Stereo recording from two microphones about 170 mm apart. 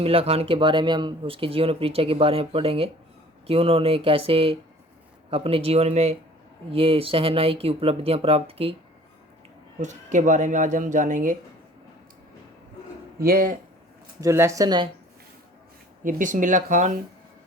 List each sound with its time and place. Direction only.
0.0 s speech: 35° right (ahead or behind)
9.7 s speech: 45° right (ahead or behind)
13.1 s speech: 60° right (ahead or behind)
14.2 s speech: 15° right (ahead or behind)
16.0 s speech: 50° right (ahead or behind)